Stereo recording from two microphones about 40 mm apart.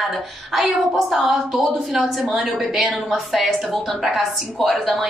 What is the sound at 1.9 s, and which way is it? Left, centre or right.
A woman's voice, centre.